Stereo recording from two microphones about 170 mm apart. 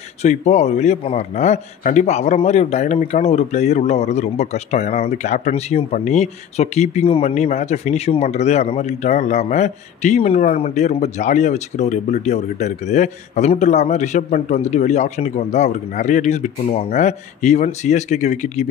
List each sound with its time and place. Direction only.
0.2 s a man's voice: 45° left (ahead or behind)